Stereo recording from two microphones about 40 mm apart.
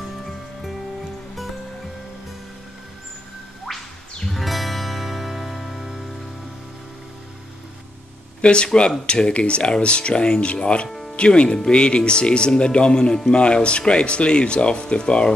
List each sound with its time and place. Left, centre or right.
4.3 s music: centre
8.4 s speech: left